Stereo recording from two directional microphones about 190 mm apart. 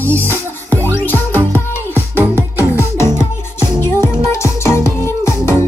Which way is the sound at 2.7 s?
15° left (ahead or behind).